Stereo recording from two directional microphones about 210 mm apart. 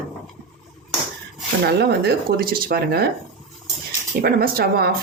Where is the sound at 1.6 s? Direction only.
50° right (ahead or behind).